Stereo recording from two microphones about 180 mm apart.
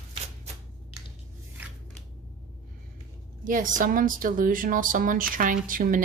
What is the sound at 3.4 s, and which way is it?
A woman's voice, 50° right (ahead or behind).